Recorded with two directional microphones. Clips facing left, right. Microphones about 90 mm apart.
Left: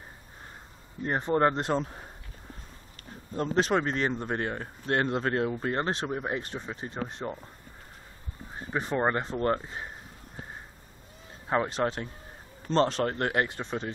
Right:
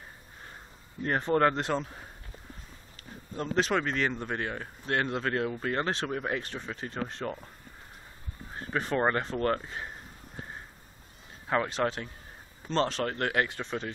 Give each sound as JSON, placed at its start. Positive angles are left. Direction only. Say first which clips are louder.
{"t": 1.0, "sound": "speech", "louder": "even", "side_deg": 20}
{"t": 3.3, "sound": "speech", "louder": "left 2 dB", "side_deg": 35}
{"t": 8.5, "sound": "speech", "louder": "even", "side_deg": 15}
{"t": 11.4, "sound": "speech", "louder": "left 1 dB", "side_deg": 25}